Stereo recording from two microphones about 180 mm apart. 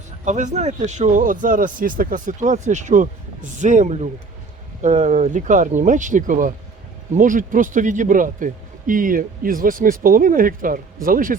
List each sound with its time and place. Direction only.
0.3 s speech: 40° right (ahead or behind)